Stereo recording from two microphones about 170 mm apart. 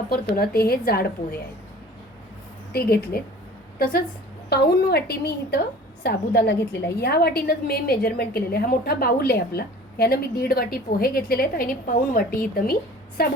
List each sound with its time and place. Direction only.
0.1 s a woman's voice: 65° left (ahead or behind)
2.7 s a woman's voice: 65° left (ahead or behind)
4.4 s a woman's voice: 70° left (ahead or behind)